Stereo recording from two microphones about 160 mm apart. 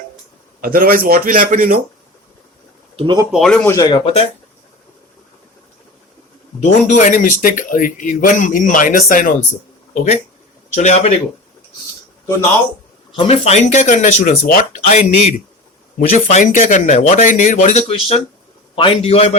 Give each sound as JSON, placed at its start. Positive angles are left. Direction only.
{"t": 0.6, "sound": "speech", "side_deg": -65}
{"t": 2.9, "sound": "speech", "side_deg": -35}
{"t": 3.3, "sound": "speech", "side_deg": 5}
{"t": 3.8, "sound": "a man's voice", "side_deg": 30}
{"t": 6.6, "sound": "speech", "side_deg": 50}
{"t": 9.9, "sound": "speech", "side_deg": 45}
{"t": 13.1, "sound": "speech", "side_deg": 40}
{"t": 14.8, "sound": "speech", "side_deg": 50}
{"t": 16.0, "sound": "speech", "side_deg": 65}
{"t": 16.3, "sound": "a man's voice", "side_deg": 50}